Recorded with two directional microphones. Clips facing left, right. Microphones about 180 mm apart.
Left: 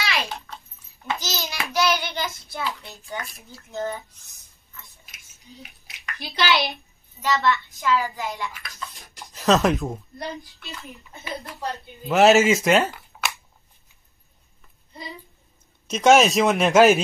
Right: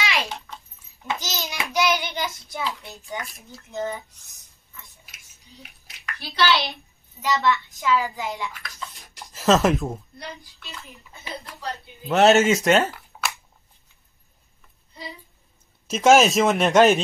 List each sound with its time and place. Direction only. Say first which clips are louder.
0.0 s dog: right 1 dB; 20° right (ahead or behind)
1.0 s child singing: left 1 dB; 20° right (ahead or behind)
6.1 s a child's voice: right 1 dB; 15° left (ahead or behind)
7.2 s child singing: even; 15° right (ahead or behind)
9.3 s speech: right 1 dB; centre (ahead or behind)
12.1 s speech: left 1 dB; centre (ahead or behind)
15.9 s speech: even; centre (ahead or behind)